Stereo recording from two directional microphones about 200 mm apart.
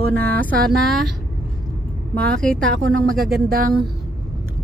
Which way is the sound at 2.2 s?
5° left (ahead or behind).